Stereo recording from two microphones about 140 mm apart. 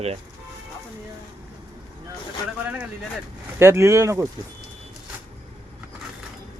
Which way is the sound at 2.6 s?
10° right (ahead or behind).